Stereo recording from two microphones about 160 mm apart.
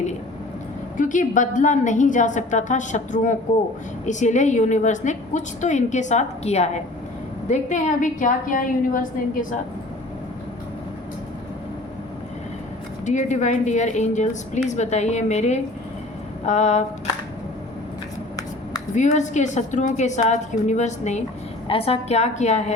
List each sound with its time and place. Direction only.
0.9 s a woman's voice: 55° left (ahead or behind)
13.1 s a woman's voice: 50° left (ahead or behind)
18.9 s a woman's voice: 50° left (ahead or behind)